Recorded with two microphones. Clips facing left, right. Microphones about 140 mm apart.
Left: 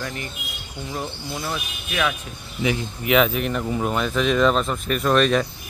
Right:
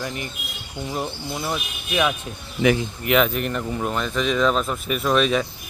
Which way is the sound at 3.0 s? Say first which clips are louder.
Left 2 dB; centre (ahead or behind).